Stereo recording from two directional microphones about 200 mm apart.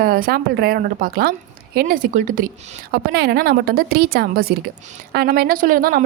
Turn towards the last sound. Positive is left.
turn(degrees=-45)  # may be behind; listen again after turning